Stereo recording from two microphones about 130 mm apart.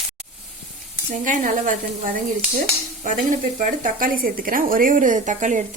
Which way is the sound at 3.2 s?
90° right.